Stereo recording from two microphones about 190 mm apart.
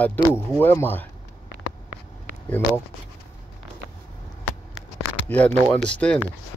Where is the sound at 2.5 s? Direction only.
10° left (ahead or behind).